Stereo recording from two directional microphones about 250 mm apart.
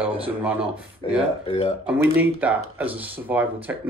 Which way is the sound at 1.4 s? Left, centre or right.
Left.